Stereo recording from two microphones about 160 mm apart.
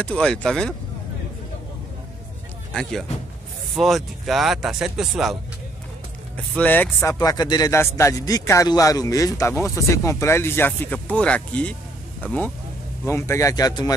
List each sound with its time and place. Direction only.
0.0 s speech: 5° left (ahead or behind)
2.7 s speech: 5° left (ahead or behind); by 13.9 s 25° left (ahead or behind)